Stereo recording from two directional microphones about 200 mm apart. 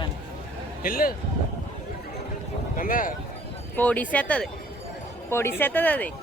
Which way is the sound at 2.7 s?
45° left (ahead or behind).